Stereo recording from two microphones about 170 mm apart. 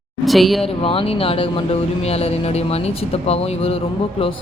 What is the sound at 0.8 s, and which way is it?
Speech, 30° left (ahead or behind).